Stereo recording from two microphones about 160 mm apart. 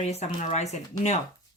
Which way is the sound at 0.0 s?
45° left (ahead or behind).